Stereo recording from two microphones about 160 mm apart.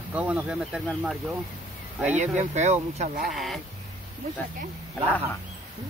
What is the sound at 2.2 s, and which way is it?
Speech, 45° right (ahead or behind).